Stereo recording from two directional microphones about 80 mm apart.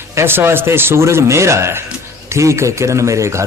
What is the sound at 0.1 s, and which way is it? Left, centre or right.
Speech, right.